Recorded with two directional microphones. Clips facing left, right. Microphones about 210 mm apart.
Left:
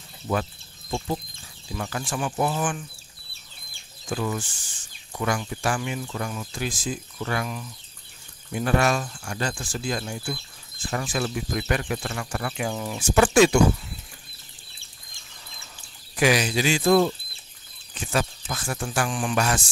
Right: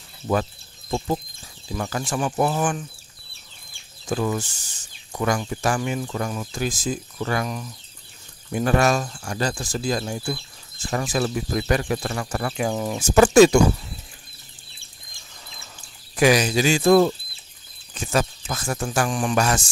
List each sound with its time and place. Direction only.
0.9 s speech: 50° right (ahead or behind)
1.7 s speech: 40° right (ahead or behind)
4.1 s speech: 40° right (ahead or behind)
16.2 s speech: 40° right (ahead or behind)